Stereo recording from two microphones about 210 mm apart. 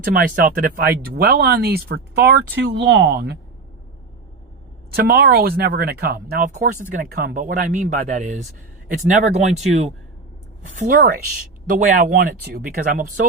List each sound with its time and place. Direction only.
0.0 s speech: 45° right (ahead or behind)
4.9 s speech: 50° right (ahead or behind)